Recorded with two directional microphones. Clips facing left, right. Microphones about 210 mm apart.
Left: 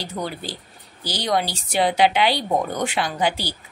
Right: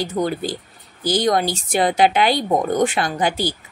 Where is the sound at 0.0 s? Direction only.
50° right (ahead or behind).